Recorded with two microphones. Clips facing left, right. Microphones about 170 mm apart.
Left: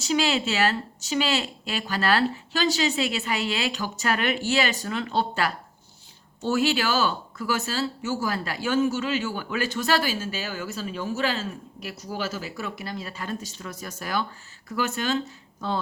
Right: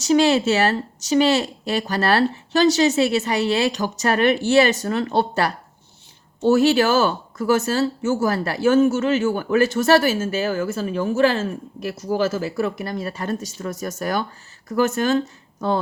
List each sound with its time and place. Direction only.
0.1 s speech: 40° right (ahead or behind)